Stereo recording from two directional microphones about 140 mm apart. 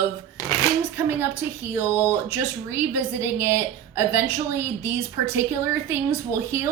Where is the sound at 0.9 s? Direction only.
15° right (ahead or behind).